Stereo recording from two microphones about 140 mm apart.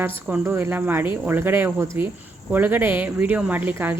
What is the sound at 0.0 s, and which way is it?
Speech, 15° right (ahead or behind).